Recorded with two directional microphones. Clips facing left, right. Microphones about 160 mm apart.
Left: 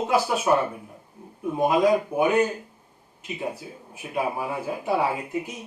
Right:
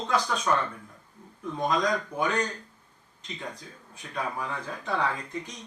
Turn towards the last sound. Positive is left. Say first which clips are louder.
# left 6 dB
turn(degrees=10)  # may be behind; listen again after turning